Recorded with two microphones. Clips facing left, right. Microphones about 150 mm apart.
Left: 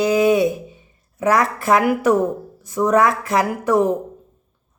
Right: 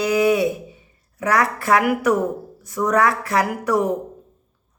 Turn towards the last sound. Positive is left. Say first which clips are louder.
# left 3 dB
turn(degrees=25)  # may be behind; listen again after turning